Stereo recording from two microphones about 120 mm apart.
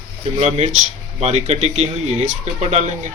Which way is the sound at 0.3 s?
60° right (ahead or behind).